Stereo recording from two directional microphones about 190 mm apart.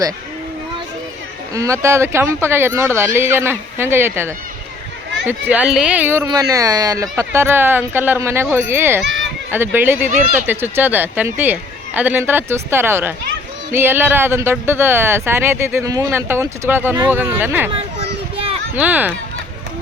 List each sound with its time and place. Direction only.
1.5 s speech: 15° right (ahead or behind)
17.7 s children playing: 30° right (ahead or behind)
18.8 s speech: 10° right (ahead or behind)